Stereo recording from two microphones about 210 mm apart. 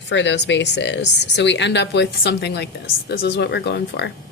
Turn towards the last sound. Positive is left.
turn(degrees=55)  # may be behind; listen again after turning